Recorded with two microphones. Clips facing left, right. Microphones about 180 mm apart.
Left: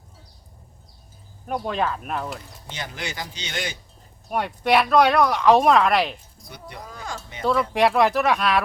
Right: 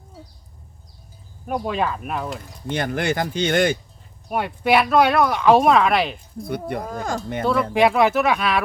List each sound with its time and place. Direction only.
1.5 s speech: 5° right (ahead or behind)
2.6 s speech: 55° right (ahead or behind)
4.3 s speech: centre (ahead or behind)
6.4 s speech: 55° right (ahead or behind)
7.7 s speech: centre (ahead or behind)